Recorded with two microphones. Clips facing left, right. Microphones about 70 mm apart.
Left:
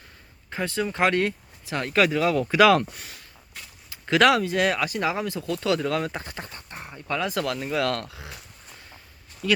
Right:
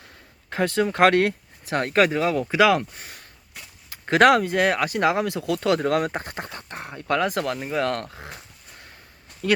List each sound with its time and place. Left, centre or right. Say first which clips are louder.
0.5 s speech: right 5 dB; right
2.5 s speech: left 2 dB; centre
4.0 s speech: right 3 dB; right
6.5 s a sound: right 4 dB; right
7.4 s speech: right 1 dB; right
9.4 s speech: right 2 dB; right